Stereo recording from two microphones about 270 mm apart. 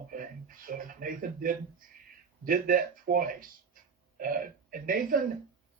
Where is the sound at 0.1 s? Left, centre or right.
Right.